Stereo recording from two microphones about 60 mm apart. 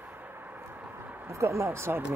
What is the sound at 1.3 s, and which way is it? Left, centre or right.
Speech, right.